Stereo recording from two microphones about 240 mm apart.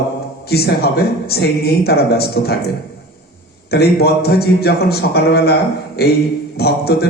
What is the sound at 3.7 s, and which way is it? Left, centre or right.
A man's voice, left.